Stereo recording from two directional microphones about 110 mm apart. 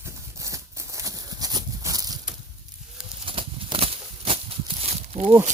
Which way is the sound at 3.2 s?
55° right (ahead or behind).